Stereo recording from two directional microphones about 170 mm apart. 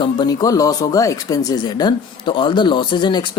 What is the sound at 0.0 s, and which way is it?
Speech, 25° left (ahead or behind).